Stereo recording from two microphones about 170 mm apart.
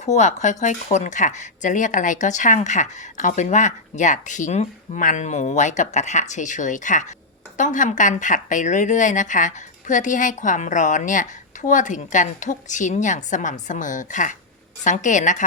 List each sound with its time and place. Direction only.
0.0 s speech: 40° left (ahead or behind)